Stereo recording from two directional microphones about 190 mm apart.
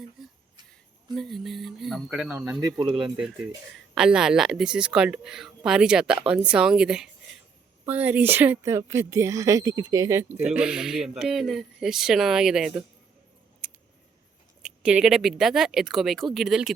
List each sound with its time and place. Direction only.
0.2 s a sound: centre (ahead or behind)
1.1 s speech: centre (ahead or behind)
2.6 s speech: 20° right (ahead or behind)
3.9 s a woman's voice: 5° right (ahead or behind)
14.6 s speech: 5° right (ahead or behind)